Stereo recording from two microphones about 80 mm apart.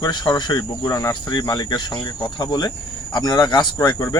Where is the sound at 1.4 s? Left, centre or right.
Left.